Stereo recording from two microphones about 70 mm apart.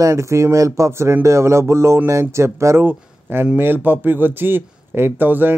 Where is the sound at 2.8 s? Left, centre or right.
Right.